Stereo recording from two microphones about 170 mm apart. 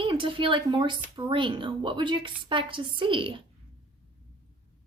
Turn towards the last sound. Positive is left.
turn(degrees=-30)  # may be behind; listen again after turning